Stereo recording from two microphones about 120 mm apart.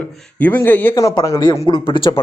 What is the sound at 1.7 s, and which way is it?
Speech, 45° left (ahead or behind).